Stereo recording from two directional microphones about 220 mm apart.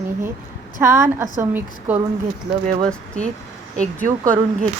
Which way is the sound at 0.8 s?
10° right (ahead or behind).